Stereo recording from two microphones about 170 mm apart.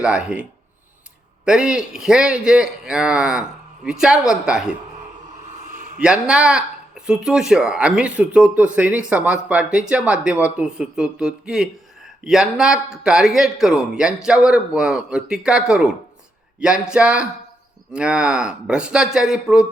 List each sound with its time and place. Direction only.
0.0 s speech: 5° right (ahead or behind)
1.5 s speech: 5° right (ahead or behind)
5.6 s a sound: 45° right (ahead or behind)
6.0 s speech: 5° right (ahead or behind)